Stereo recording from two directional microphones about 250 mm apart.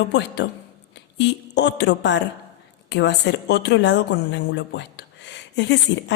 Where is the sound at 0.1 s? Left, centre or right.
Left.